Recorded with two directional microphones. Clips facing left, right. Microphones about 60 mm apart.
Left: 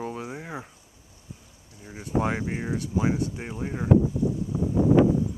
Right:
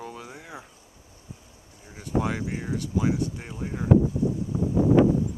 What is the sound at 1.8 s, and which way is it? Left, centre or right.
Speech, left.